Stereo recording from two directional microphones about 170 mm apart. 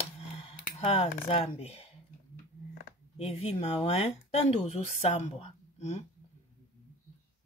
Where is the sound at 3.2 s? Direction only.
35° left (ahead or behind).